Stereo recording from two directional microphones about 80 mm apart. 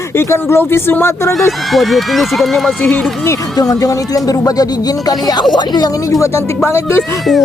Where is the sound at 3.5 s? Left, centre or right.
Left.